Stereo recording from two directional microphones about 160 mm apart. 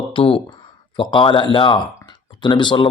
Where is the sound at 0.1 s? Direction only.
35° left (ahead or behind).